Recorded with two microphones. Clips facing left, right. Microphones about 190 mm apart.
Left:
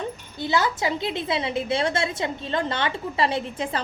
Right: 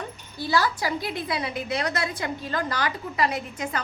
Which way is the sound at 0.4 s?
20° left (ahead or behind).